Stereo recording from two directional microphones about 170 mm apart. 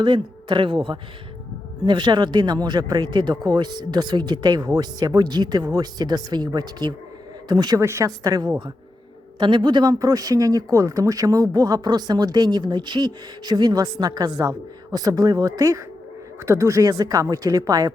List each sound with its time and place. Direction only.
0.0 s speech: 30° right (ahead or behind)